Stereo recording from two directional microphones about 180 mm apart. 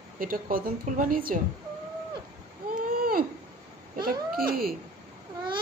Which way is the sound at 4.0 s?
55° right (ahead or behind).